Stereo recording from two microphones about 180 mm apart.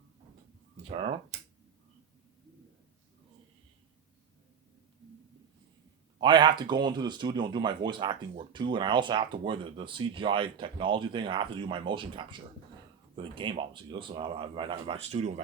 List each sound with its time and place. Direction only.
0.9 s speech: 35° right (ahead or behind)
6.1 s speech: 25° right (ahead or behind)